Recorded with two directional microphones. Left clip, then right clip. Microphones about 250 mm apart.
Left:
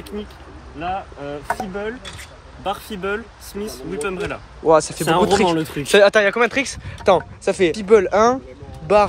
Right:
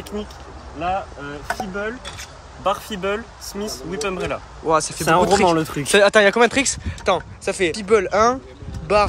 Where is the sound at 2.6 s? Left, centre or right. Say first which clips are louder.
Right 3 dB; centre.